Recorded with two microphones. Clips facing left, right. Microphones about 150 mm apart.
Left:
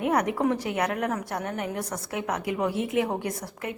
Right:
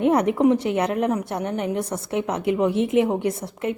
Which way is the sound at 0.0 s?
25° right (ahead or behind).